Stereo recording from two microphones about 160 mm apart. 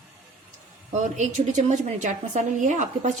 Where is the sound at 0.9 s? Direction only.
50° right (ahead or behind).